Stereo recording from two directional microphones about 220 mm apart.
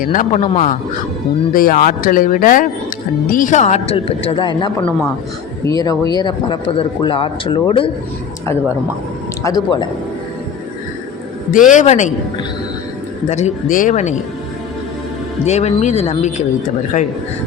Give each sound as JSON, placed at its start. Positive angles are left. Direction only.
{"t": 0.0, "sound": "a woman's voice", "side_deg": 35}
{"t": 9.4, "sound": "speech", "side_deg": 15}
{"t": 11.5, "sound": "speech", "side_deg": 35}
{"t": 13.2, "sound": "speech", "side_deg": 30}
{"t": 15.4, "sound": "speech", "side_deg": 30}